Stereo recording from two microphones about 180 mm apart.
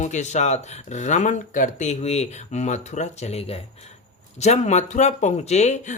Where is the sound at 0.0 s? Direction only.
40° left (ahead or behind).